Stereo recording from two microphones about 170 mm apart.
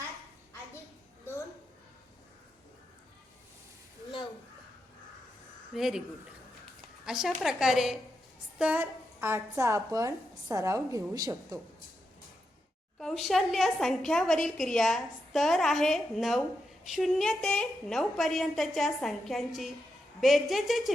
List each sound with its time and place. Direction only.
5.7 s a woman's voice: centre (ahead or behind)
7.0 s a woman's voice: 5° right (ahead or behind); by 11.6 s 20° right (ahead or behind)
13.0 s a woman's voice: centre (ahead or behind)